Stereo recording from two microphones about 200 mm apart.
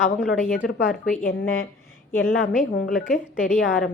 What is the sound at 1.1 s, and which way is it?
A woman's voice, 45° left (ahead or behind).